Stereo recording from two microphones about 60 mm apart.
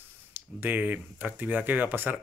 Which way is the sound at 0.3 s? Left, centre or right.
Right.